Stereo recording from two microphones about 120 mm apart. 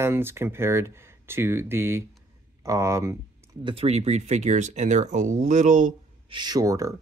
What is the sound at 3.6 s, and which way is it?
Speech, 50° right (ahead or behind).